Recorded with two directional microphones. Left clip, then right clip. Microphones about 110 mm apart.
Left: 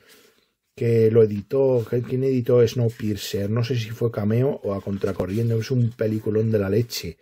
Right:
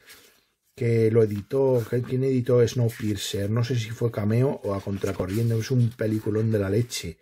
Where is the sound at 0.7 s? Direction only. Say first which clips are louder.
Left 4 dB; 30° left (ahead or behind).